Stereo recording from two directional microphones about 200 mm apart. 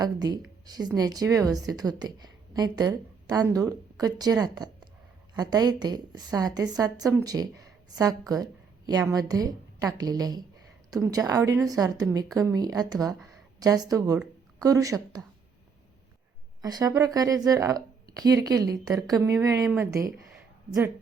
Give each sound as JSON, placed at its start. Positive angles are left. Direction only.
{"t": 0.0, "sound": "a woman's voice", "side_deg": -20}
{"t": 16.6, "sound": "speech", "side_deg": -20}